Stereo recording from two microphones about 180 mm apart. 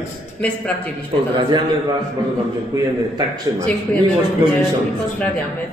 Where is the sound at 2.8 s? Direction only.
20° right (ahead or behind).